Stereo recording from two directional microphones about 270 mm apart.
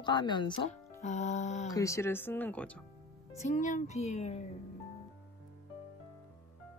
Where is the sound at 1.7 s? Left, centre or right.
Centre.